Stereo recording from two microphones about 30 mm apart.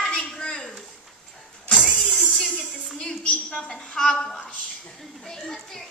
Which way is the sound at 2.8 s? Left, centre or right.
Left.